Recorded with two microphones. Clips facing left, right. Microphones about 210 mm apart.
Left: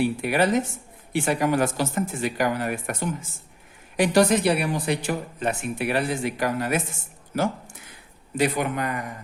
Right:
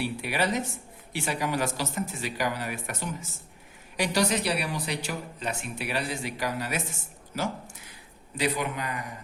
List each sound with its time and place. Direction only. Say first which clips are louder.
0.0 s a woman's voice: left 7 dB; 50° left (ahead or behind)